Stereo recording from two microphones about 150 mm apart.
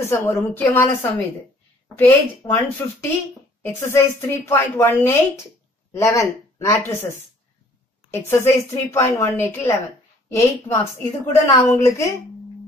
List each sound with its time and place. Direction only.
0.0 s speech: 15° left (ahead or behind)
8.3 s speech: 15° left (ahead or behind)